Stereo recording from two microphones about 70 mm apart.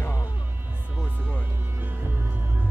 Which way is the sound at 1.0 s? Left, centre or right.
Right.